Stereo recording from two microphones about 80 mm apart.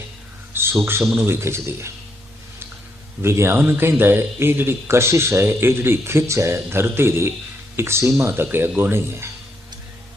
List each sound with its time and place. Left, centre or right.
0.5 s a sound: right
1.2 s speech: right
3.2 s speech: right
8.4 s speech: right